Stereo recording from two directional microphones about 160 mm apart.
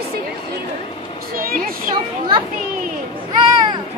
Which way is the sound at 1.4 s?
65° right (ahead or behind).